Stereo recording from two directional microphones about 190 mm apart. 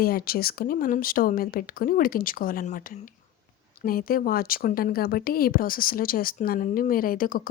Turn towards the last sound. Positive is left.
turn(degrees=45)  # may be behind; listen again after turning